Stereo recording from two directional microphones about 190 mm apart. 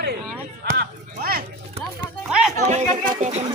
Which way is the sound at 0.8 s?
50° right (ahead or behind).